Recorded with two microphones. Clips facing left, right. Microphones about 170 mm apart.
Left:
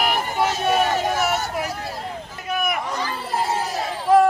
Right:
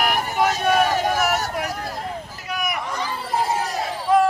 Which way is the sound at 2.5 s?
55° left (ahead or behind).